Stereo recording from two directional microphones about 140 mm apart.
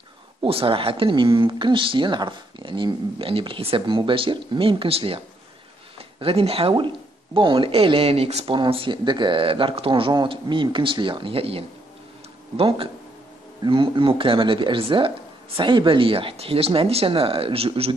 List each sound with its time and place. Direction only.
0.4 s speech: 40° right (ahead or behind)